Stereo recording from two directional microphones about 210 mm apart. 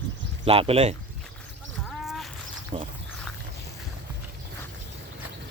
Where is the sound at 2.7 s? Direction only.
25° right (ahead or behind).